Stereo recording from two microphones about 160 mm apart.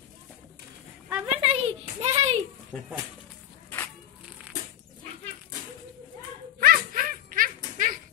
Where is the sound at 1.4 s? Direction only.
35° right (ahead or behind).